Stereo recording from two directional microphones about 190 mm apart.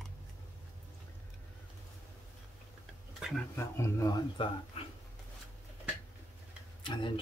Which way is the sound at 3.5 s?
15° left (ahead or behind).